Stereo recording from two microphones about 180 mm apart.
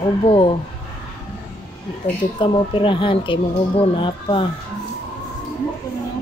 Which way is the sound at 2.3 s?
30° left (ahead or behind).